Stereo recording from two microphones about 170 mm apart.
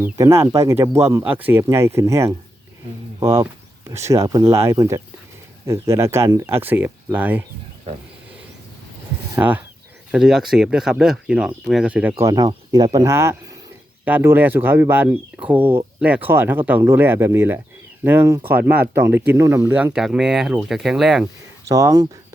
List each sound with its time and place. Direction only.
0.0 s speech: 15° right (ahead or behind)
9.3 s speech: 10° right (ahead or behind)
12.2 s speech: 20° right (ahead or behind); by 21.2 s 5° right (ahead or behind)
21.7 s speech: 20° right (ahead or behind)